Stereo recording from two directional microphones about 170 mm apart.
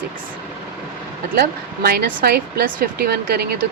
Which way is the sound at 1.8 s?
65° right (ahead or behind).